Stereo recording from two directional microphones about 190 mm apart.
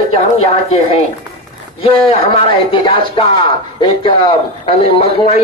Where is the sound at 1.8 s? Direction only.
30° left (ahead or behind).